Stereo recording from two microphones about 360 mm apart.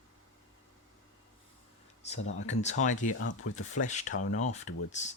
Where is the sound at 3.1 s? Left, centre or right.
Left.